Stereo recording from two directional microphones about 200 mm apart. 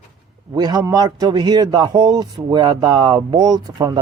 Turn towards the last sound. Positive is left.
turn(degrees=-20)  # may be behind; listen again after turning